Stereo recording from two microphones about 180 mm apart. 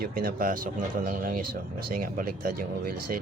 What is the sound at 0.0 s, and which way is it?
Speech, 55° right (ahead or behind).